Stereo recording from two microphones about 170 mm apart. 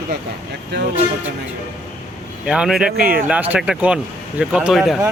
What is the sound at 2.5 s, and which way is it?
Speech, 5° right (ahead or behind).